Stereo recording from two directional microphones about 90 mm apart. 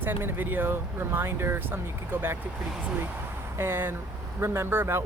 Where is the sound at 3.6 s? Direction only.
25° right (ahead or behind).